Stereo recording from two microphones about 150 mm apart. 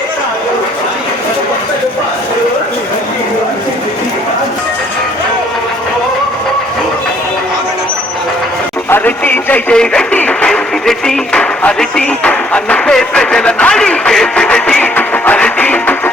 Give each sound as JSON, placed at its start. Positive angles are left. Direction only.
{"t": 8.9, "sound": "speech", "side_deg": 15}